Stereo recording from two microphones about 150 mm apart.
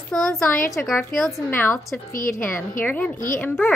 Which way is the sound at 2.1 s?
65° left (ahead or behind).